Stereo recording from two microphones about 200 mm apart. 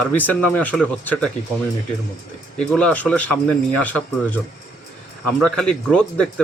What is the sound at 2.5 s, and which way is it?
Speech, 5° left (ahead or behind).